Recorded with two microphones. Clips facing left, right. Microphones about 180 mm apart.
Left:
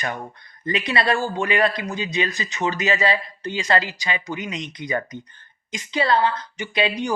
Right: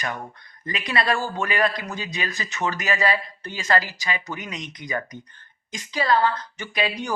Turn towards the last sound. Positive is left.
turn(degrees=20)  # may be behind; listen again after turning